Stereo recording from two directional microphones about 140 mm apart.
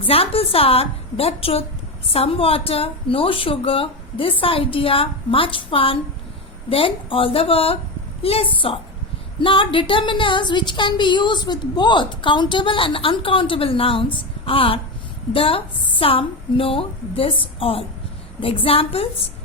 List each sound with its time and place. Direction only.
0.0 s a woman's voice: 45° left (ahead or behind)